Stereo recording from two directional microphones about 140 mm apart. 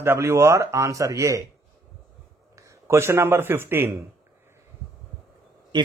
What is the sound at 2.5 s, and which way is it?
A man's voice, 20° right (ahead or behind).